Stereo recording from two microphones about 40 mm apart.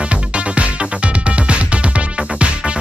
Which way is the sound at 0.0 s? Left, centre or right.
Right.